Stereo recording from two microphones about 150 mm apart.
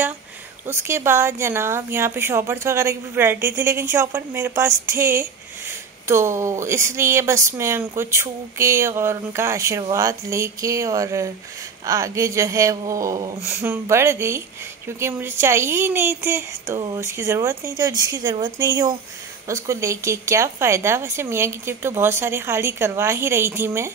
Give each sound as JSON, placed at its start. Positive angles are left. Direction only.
{"t": 0.7, "sound": "a woman's voice", "side_deg": -15}